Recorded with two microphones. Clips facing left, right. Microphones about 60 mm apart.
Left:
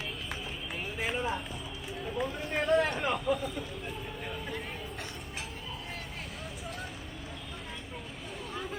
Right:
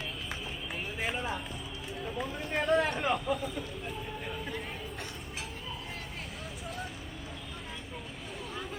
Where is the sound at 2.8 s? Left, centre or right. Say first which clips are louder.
Even; centre.